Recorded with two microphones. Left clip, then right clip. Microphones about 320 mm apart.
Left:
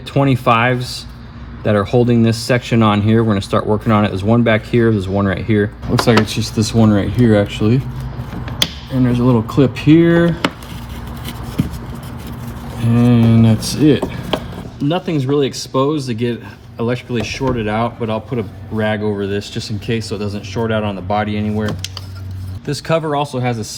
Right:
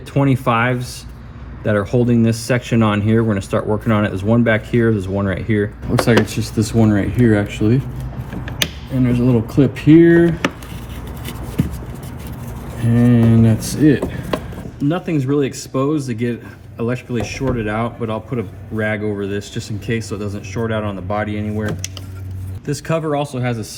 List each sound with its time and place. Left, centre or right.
0.1 s speech: left
9.0 s speech: centre
12.9 s speech: centre